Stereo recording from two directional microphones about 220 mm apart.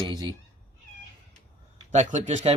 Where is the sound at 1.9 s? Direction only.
30° right (ahead or behind).